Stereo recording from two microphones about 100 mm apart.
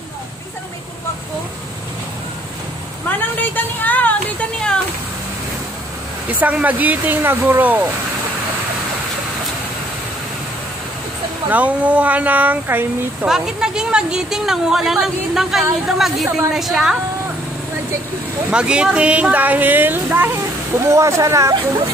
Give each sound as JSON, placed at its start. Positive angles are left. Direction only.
{"t": 3.1, "sound": "a sound", "side_deg": 20}
{"t": 6.4, "sound": "speech", "side_deg": -15}
{"t": 11.5, "sound": "speech", "side_deg": -15}
{"t": 13.3, "sound": "speech", "side_deg": -5}
{"t": 18.5, "sound": "speech", "side_deg": -10}
{"t": 20.7, "sound": "speech", "side_deg": -30}